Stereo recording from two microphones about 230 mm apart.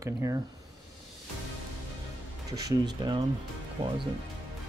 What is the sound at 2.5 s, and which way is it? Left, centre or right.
Speech, centre.